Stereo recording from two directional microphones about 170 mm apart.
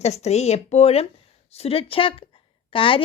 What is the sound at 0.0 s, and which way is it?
A woman's voice, 40° left (ahead or behind).